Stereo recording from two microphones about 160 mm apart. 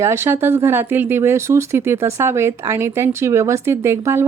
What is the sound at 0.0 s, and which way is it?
A woman's voice, 15° right (ahead or behind).